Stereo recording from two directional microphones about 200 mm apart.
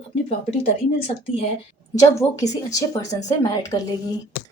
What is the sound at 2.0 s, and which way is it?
Speech, 15° left (ahead or behind).